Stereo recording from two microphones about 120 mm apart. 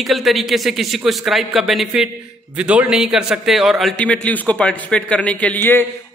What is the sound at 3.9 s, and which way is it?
A man's voice, 10° left (ahead or behind).